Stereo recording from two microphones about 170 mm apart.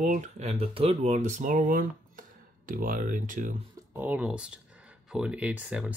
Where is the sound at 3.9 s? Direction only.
10° right (ahead or behind).